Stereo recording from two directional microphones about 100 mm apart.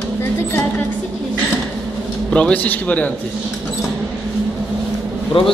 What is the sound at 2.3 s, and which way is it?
Speech, 10° left (ahead or behind).